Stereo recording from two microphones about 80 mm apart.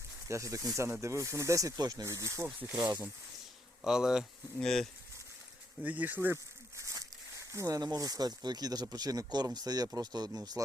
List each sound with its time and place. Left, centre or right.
0.3 s speech: right
2.0 s speech: right
3.8 s speech: centre
4.5 s bee: centre
5.8 s snake: centre; by 7.8 s right
7.8 s speech: right